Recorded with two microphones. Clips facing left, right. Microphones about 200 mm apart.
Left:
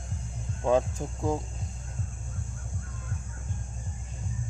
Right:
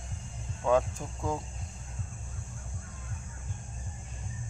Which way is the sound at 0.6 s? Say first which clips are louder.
Left 2 dB; 25° left (ahead or behind).